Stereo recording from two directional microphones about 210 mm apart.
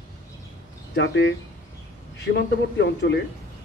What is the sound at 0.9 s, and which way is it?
Speech, 60° left (ahead or behind).